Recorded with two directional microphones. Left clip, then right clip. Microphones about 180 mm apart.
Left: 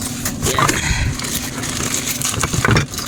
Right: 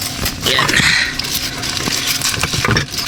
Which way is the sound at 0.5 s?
10° left (ahead or behind).